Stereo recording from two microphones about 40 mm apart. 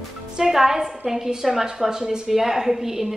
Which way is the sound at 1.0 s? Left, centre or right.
Centre.